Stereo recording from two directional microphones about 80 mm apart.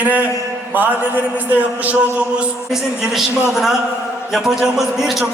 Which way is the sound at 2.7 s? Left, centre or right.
Centre.